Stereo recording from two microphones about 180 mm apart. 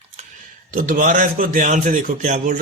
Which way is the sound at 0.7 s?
50° right (ahead or behind).